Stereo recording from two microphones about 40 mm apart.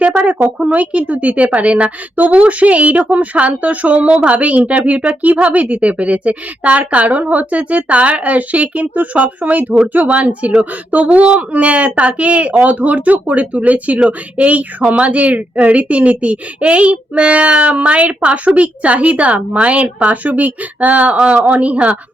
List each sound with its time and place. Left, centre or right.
0.2 s a woman's voice: right